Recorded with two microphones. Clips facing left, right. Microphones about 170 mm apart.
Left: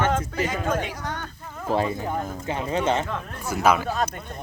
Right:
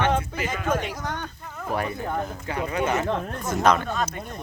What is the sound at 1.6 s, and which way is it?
Speech, 25° left (ahead or behind).